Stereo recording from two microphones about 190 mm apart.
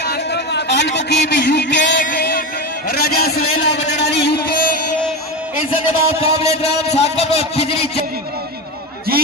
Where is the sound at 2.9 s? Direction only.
55° left (ahead or behind).